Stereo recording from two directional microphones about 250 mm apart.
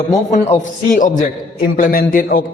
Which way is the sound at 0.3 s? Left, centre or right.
Left.